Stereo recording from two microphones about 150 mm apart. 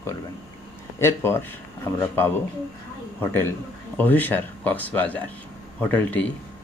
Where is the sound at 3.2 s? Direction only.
15° left (ahead or behind).